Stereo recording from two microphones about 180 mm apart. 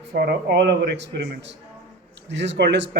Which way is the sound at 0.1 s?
65° right (ahead or behind).